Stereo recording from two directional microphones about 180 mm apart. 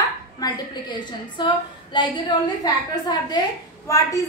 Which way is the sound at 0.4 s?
25° left (ahead or behind).